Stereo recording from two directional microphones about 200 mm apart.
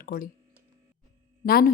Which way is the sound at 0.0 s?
45° left (ahead or behind).